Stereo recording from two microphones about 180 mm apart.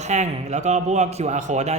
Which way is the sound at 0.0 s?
40° right (ahead or behind).